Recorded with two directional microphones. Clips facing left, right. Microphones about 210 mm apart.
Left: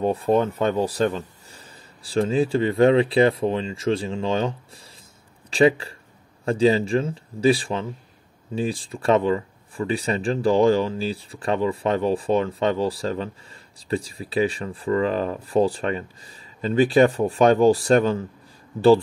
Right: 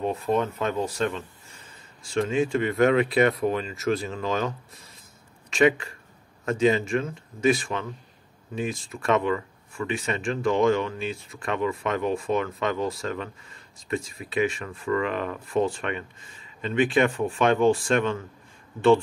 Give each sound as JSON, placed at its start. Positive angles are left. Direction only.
{"t": 0.0, "sound": "speech", "side_deg": 30}